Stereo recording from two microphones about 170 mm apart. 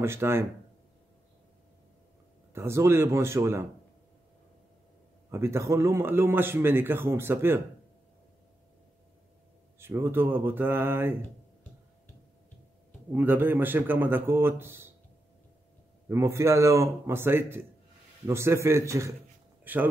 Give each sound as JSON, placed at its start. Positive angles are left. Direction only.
{"t": 0.0, "sound": "a man's voice", "side_deg": -15}
{"t": 2.5, "sound": "a man's voice", "side_deg": -15}
{"t": 5.3, "sound": "a man's voice", "side_deg": -15}
{"t": 9.8, "sound": "a man's voice", "side_deg": -15}
{"t": 13.1, "sound": "a man's voice", "side_deg": -10}
{"t": 16.1, "sound": "a man's voice", "side_deg": -15}